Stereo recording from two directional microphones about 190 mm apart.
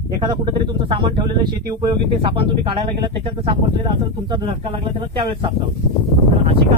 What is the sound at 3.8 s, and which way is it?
Speech, 25° right (ahead or behind).